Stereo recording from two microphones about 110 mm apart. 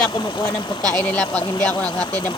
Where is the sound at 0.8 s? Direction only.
35° right (ahead or behind).